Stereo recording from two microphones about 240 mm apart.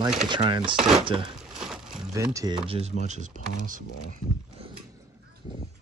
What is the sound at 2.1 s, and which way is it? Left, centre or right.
Speech, centre.